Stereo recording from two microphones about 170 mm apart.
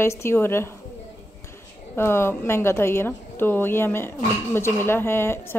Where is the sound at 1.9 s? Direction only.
15° left (ahead or behind).